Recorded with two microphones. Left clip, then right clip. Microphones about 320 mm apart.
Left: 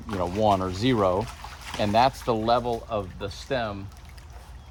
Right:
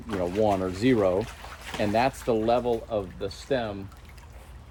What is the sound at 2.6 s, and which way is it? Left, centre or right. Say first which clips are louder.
Speech: right 1 dB; left.